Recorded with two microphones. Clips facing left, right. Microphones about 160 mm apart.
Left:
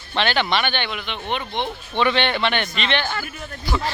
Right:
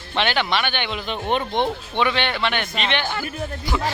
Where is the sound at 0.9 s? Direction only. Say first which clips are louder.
Right 3 dB; 35° right (ahead or behind).